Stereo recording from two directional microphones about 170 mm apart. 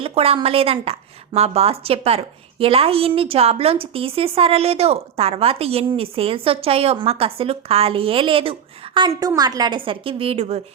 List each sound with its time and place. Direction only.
0.0 s a woman's voice: 35° right (ahead or behind)